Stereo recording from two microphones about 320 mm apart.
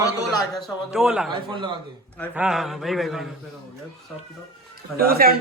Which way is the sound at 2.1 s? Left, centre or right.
Centre.